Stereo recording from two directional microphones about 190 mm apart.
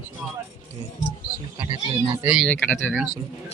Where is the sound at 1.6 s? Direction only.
20° right (ahead or behind).